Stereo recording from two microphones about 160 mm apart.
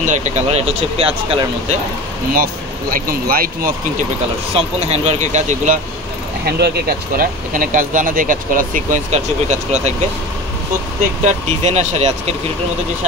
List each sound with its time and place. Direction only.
0.0 s speech: 50° right (ahead or behind)
2.3 s speech: 65° right (ahead or behind)
4.6 s speech: 40° right (ahead or behind)
6.4 s speech: 80° right; by 9.9 s 45° right (ahead or behind)
11.2 s speech: 45° right (ahead or behind)